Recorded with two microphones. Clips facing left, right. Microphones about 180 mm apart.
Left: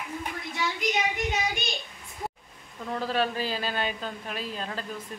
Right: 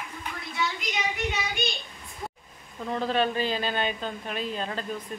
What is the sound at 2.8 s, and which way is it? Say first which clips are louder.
Speech: right 2 dB; 5° left (ahead or behind).